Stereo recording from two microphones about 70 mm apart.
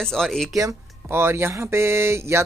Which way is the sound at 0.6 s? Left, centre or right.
Right.